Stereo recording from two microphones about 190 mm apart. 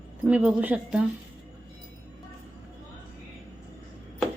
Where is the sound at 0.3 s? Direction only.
5° right (ahead or behind).